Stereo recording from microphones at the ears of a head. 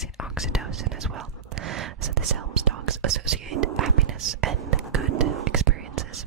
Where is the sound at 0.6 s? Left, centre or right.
Right.